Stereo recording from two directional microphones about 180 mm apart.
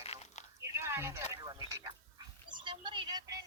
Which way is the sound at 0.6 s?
15° right (ahead or behind).